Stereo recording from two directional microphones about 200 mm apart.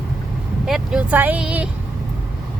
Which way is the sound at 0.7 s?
5° right (ahead or behind).